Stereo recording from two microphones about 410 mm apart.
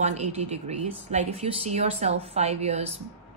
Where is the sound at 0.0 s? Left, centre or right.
Centre.